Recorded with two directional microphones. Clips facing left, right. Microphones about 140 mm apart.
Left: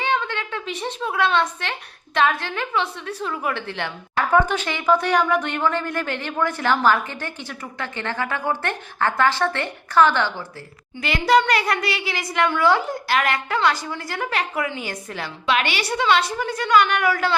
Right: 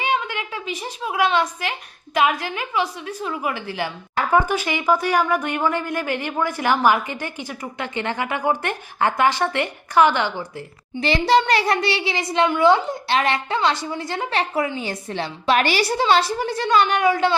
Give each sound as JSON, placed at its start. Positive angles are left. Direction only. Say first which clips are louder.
{"t": 0.0, "sound": "a woman's voice", "louder": "even", "side_deg": -10}
{"t": 11.0, "sound": "a child's voice", "louder": "right 1 dB", "side_deg": -30}